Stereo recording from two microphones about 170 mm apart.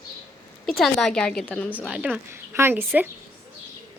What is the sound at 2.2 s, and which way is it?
Speech, 15° right (ahead or behind).